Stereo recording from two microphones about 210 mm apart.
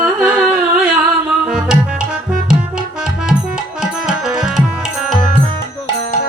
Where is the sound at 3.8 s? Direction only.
5° right (ahead or behind).